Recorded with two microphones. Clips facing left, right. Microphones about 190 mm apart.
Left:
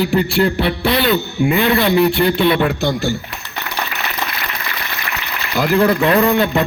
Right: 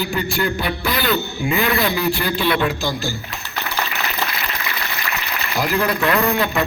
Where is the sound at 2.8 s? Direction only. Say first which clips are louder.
Left 6 dB; 65° left (ahead or behind).